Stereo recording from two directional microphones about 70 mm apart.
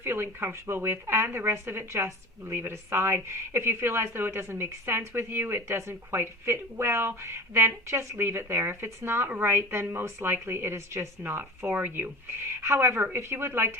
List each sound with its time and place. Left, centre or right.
0.0 s speech: right